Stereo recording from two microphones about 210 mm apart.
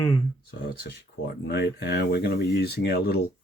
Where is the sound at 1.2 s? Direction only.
50° left (ahead or behind).